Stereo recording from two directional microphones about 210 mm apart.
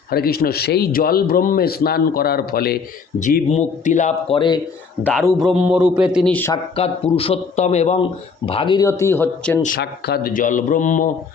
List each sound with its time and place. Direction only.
0.1 s a man's voice: 45° left (ahead or behind); by 4.6 s 20° left (ahead or behind)
5.4 s a man's voice: centre (ahead or behind)
6.1 s speech: 5° left (ahead or behind)
6.7 s a man's voice: 30° left (ahead or behind); by 9.6 s 5° left (ahead or behind)
9.6 s a man's voice: 50° left (ahead or behind)